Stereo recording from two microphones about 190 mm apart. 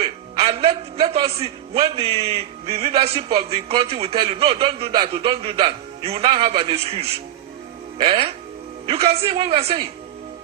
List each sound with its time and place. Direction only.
0.0 s a man's voice: 30° right (ahead or behind)